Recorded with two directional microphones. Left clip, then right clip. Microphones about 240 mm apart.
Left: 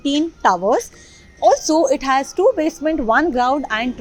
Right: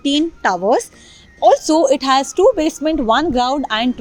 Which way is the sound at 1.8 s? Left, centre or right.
Right.